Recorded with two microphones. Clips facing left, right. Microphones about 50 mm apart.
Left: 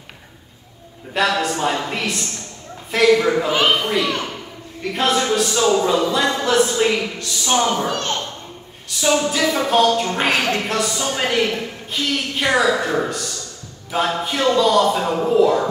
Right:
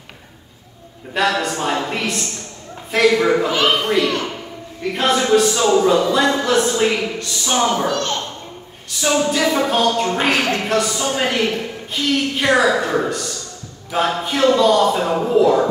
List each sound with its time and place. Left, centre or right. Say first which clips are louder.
1.1 s speech: even; centre
7.5 s a woman's voice: right 1 dB; centre
7.8 s a child's voice: right 3 dB; left
9.0 s a woman's voice: right 1 dB; centre